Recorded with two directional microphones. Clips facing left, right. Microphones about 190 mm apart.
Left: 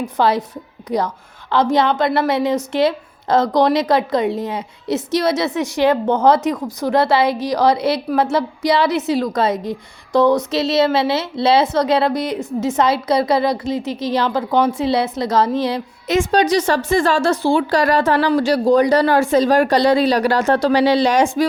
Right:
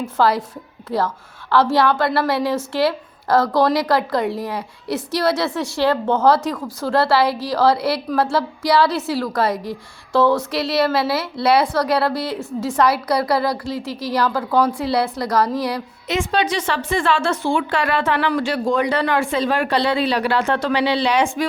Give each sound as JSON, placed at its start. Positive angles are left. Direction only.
{"t": 0.0, "sound": "a woman's voice", "side_deg": 20}
{"t": 16.0, "sound": "speech", "side_deg": 45}